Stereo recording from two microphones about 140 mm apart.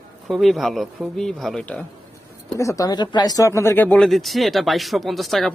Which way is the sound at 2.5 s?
20° left (ahead or behind).